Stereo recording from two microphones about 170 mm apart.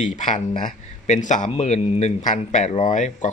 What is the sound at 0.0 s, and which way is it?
Speech, 45° left (ahead or behind).